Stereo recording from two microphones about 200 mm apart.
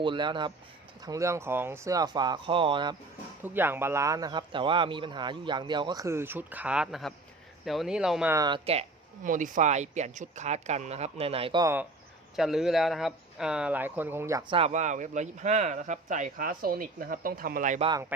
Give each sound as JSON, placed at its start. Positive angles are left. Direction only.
{"t": 0.0, "sound": "speech", "side_deg": -25}
{"t": 3.4, "sound": "speech", "side_deg": -10}
{"t": 8.3, "sound": "speech", "side_deg": -20}
{"t": 11.6, "sound": "speech", "side_deg": -10}
{"t": 14.5, "sound": "speech", "side_deg": -30}
{"t": 17.8, "sound": "speech", "side_deg": -20}